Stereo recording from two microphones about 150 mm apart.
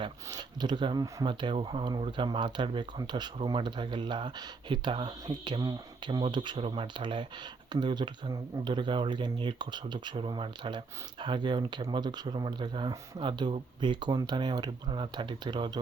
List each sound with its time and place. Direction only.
0.0 s speech: 25° right (ahead or behind)